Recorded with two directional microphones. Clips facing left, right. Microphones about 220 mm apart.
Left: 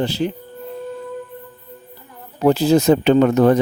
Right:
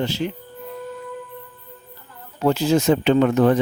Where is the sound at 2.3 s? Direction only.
35° left (ahead or behind).